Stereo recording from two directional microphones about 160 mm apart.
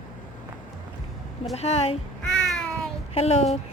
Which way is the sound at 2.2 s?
90° left.